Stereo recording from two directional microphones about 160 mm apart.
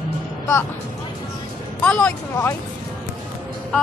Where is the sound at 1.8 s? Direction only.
5° left (ahead or behind).